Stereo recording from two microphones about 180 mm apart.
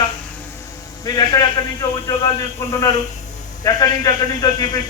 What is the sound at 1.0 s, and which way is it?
Speech, 25° left (ahead or behind).